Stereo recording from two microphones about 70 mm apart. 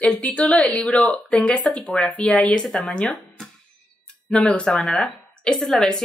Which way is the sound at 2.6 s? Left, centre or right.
Centre.